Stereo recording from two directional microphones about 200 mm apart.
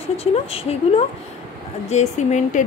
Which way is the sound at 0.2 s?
30° left (ahead or behind).